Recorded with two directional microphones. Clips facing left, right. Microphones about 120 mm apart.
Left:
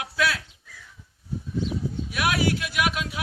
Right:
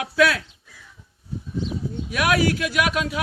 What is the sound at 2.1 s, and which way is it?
Speech, 85° right.